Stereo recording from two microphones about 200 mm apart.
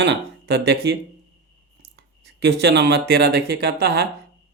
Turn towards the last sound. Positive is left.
turn(degrees=-55)  # may be behind; listen again after turning